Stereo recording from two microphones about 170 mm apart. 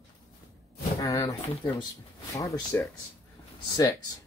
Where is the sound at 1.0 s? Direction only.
20° left (ahead or behind).